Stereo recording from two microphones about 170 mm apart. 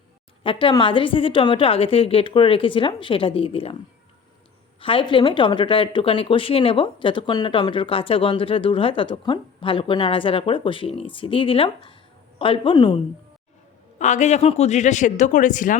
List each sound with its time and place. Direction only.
0.4 s speech: 30° left (ahead or behind)
4.8 s a woman's voice: 30° left (ahead or behind)
14.0 s speech: 45° left (ahead or behind)